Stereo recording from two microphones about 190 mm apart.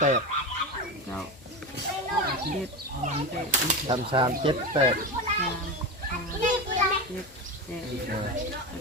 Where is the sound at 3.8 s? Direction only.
25° right (ahead or behind).